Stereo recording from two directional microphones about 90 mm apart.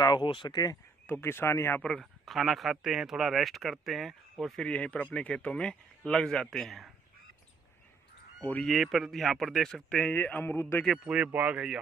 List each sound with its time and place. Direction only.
0.0 s speech: 60° left (ahead or behind)
1.0 s speech: 25° left (ahead or behind)
1.8 s speech: 5° left (ahead or behind)
4.6 s speech: 15° left (ahead or behind)
8.6 s speech: centre (ahead or behind); by 10.8 s 25° left (ahead or behind)
11.1 s speech: 15° right (ahead or behind)